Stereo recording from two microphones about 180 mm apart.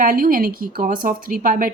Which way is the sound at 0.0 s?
50° right (ahead or behind).